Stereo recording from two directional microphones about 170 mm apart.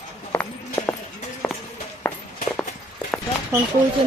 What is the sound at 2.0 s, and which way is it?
Walk, 10° left (ahead or behind).